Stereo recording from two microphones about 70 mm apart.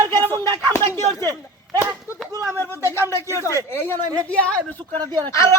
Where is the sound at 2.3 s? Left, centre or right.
Right.